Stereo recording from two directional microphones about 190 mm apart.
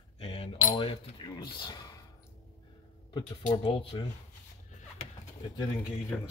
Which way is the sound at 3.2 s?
25° left (ahead or behind).